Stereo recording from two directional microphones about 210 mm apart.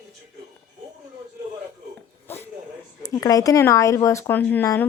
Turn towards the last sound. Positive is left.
turn(degrees=10)  # may be behind; listen again after turning